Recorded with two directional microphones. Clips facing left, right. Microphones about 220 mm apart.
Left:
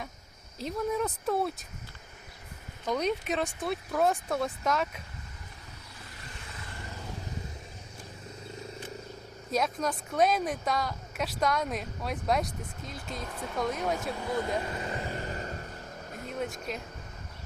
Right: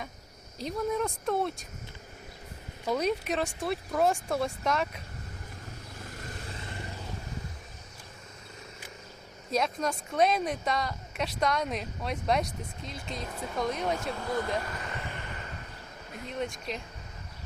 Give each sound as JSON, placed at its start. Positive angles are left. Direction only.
{"t": 0.6, "sound": "a woman's voice", "side_deg": 0}
{"t": 2.8, "sound": "a woman's voice", "side_deg": -5}
{"t": 6.1, "sound": "vehicle", "side_deg": -45}
{"t": 9.5, "sound": "a woman's voice", "side_deg": 0}
{"t": 14.6, "sound": "vehicle", "side_deg": 25}
{"t": 16.4, "sound": "a woman's voice", "side_deg": 5}